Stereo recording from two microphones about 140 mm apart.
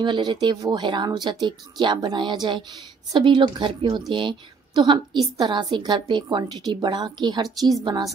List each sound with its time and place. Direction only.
0.0 s a woman's voice: 35° right (ahead or behind)